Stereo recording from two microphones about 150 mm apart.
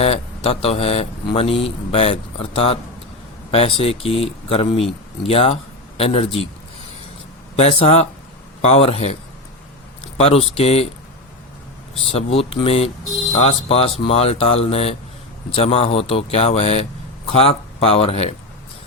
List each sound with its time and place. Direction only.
0.0 s speech: 45° left (ahead or behind)
7.6 s speech: 40° left (ahead or behind)
12.0 s speech: 40° left (ahead or behind)